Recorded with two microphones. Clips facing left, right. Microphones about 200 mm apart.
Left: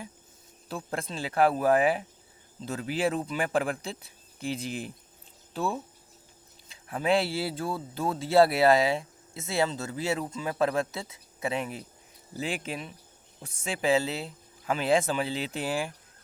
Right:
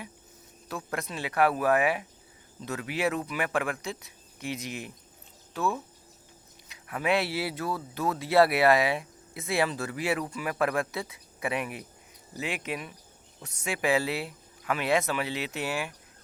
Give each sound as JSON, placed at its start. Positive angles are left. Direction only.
{"t": 0.7, "sound": "speech", "side_deg": 30}